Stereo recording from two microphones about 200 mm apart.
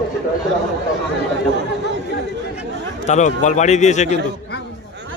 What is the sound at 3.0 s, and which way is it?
A man's voice, 35° left (ahead or behind).